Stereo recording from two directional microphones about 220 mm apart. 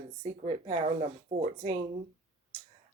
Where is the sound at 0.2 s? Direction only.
25° right (ahead or behind).